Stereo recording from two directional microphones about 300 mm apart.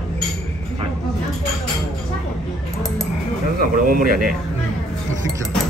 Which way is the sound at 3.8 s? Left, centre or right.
Right.